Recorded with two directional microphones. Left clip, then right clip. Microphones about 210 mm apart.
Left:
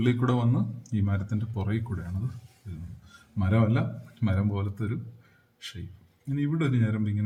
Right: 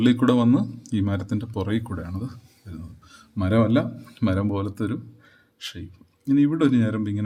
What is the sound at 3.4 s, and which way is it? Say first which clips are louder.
Speech: right 7 dB; 50° right (ahead or behind).